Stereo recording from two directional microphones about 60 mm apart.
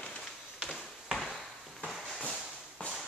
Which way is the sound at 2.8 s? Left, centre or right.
Left.